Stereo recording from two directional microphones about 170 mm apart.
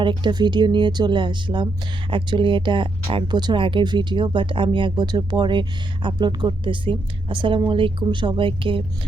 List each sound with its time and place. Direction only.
0.0 s speech: 25° right (ahead or behind)